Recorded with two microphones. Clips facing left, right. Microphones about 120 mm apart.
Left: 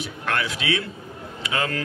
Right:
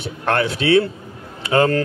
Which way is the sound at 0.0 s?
35° right (ahead or behind).